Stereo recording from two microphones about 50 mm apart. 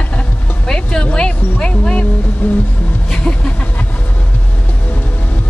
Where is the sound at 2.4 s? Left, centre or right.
Left.